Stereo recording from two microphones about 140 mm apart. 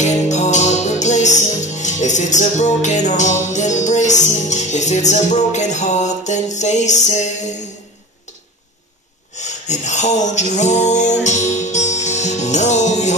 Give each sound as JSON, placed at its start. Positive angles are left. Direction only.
{"t": 0.0, "sound": "music", "side_deg": 55}
{"t": 9.4, "sound": "music", "side_deg": 55}